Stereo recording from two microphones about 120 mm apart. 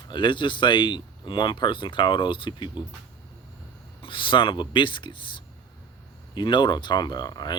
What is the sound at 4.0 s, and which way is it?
Speech, 45° left (ahead or behind).